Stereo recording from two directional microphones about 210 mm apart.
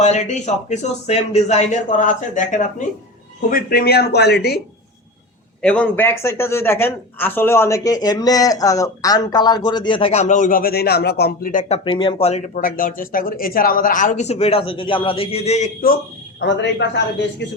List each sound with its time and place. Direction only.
0.0 s speech: 35° left (ahead or behind); by 4.6 s 50° left (ahead or behind)
5.6 s speech: 5° left (ahead or behind); by 11.6 s 45° left (ahead or behind)
11.7 s speech: 25° left (ahead or behind); by 16.0 s 40° left (ahead or behind)
16.4 s a man's voice: 55° left (ahead or behind)